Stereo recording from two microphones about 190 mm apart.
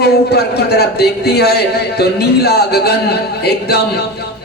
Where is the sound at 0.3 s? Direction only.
60° left (ahead or behind).